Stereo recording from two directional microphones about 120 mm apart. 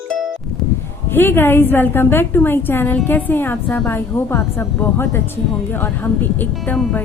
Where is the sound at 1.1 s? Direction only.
20° left (ahead or behind).